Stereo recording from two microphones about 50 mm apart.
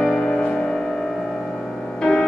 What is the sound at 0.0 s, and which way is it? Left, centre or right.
Music, centre.